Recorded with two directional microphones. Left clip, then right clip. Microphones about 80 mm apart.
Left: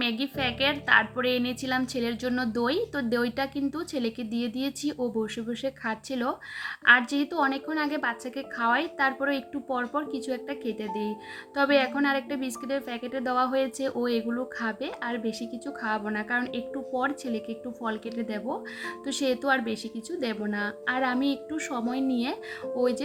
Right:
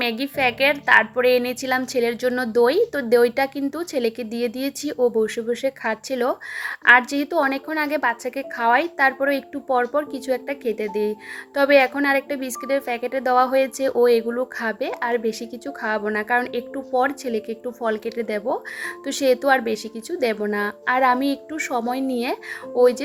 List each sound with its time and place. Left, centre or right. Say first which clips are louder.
0.0 s a woman's voice: right 7 dB; right